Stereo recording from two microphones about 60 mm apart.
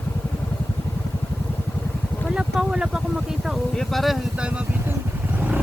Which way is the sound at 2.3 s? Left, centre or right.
Centre.